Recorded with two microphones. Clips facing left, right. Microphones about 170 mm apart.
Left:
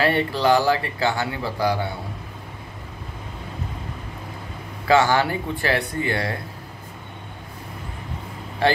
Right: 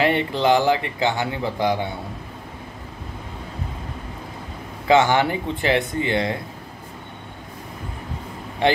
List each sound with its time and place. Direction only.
0.0 s a man's voice: 20° right (ahead or behind)
4.8 s a man's voice: 20° right (ahead or behind)
8.6 s a man's voice: 20° right (ahead or behind)